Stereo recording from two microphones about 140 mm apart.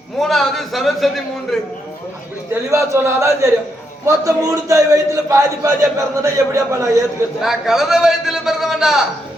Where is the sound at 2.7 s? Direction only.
20° right (ahead or behind).